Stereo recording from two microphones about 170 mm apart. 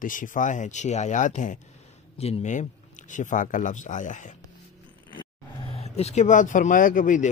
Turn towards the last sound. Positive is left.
turn(degrees=50)  # may be behind; listen again after turning